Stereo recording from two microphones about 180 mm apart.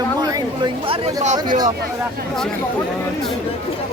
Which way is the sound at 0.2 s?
25° right (ahead or behind).